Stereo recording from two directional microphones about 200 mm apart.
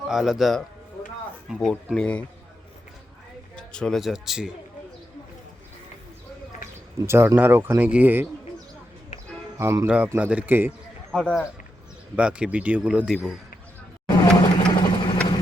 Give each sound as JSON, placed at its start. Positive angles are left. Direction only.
{"t": 0.1, "sound": "speech", "side_deg": 0}
{"t": 3.5, "sound": "a man's voice", "side_deg": 5}
{"t": 7.0, "sound": "speech", "side_deg": -15}
{"t": 9.6, "sound": "speech", "side_deg": -10}
{"t": 11.1, "sound": "speech", "side_deg": 5}
{"t": 14.4, "sound": "vehicle", "side_deg": 25}